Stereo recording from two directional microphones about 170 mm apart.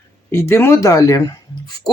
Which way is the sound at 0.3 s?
15° left (ahead or behind).